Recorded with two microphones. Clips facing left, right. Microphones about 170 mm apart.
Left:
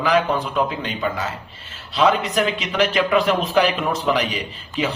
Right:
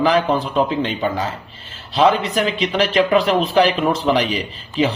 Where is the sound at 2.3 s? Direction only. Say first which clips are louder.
Right 2 dB; 35° right (ahead or behind).